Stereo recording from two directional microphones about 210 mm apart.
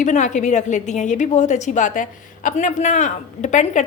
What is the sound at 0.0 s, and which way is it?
A woman's voice, 35° left (ahead or behind).